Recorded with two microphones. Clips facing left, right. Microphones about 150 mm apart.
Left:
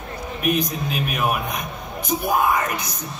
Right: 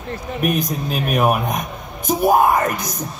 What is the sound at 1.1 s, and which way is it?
A man's voice, 45° right (ahead or behind).